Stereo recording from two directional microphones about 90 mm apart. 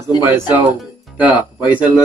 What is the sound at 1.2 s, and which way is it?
Speech, 15° right (ahead or behind).